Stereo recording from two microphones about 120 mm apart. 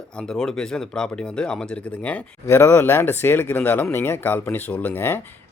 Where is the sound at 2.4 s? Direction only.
20° left (ahead or behind).